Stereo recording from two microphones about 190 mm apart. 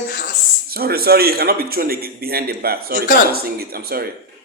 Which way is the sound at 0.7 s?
55° right (ahead or behind).